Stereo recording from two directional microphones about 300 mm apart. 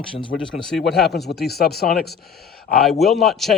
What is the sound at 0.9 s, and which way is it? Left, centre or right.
Speech, left.